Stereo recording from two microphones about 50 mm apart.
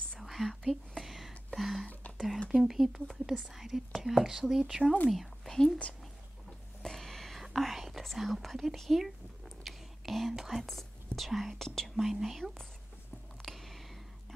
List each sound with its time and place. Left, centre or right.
0.2 s whispering: centre
2.5 s speech: centre
6.8 s a sound: centre
7.4 s whispering: centre
8.0 s speech: centre
12.0 s speech: centre
13.4 s a sound: centre